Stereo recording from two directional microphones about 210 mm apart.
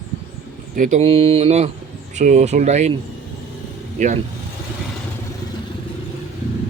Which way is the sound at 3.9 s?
35° right (ahead or behind).